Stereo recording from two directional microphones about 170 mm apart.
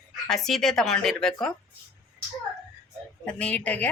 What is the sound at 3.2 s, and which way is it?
Speech, 5° left (ahead or behind).